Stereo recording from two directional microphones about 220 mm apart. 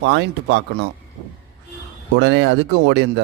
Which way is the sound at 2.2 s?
55° right (ahead or behind).